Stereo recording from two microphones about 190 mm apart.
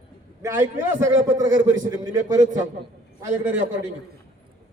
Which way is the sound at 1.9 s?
20° right (ahead or behind).